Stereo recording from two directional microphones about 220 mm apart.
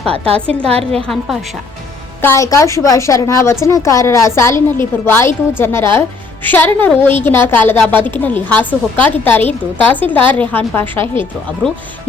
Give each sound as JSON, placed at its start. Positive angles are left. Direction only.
{"t": 0.3, "sound": "a woman's voice", "side_deg": 5}
{"t": 0.6, "sound": "a woman's voice", "side_deg": -25}
{"t": 0.9, "sound": "a woman's voice", "side_deg": 0}
{"t": 2.2, "sound": "a woman's voice", "side_deg": 15}